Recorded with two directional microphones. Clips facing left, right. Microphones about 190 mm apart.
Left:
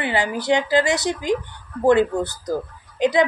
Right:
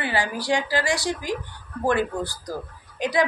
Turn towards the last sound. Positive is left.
turn(degrees=25)  # may be behind; listen again after turning